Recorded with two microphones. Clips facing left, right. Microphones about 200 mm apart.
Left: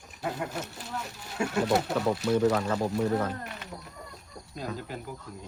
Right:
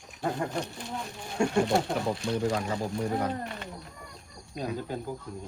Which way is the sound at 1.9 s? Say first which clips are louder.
Left 3 dB; 65° left (ahead or behind).